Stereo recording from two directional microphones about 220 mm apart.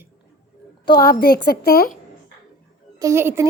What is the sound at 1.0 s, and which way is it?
Speech, 45° left (ahead or behind).